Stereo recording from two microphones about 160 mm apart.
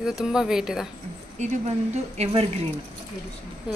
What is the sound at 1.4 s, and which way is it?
A woman's voice, 45° right (ahead or behind).